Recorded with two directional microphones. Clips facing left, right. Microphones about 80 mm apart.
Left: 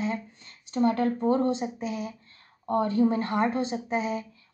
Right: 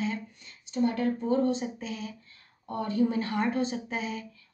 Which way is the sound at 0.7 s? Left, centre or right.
Left.